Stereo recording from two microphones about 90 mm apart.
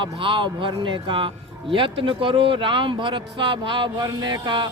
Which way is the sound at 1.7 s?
75° right (ahead or behind).